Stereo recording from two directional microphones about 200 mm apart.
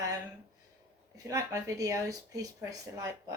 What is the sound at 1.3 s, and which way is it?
Speech, 15° right (ahead or behind).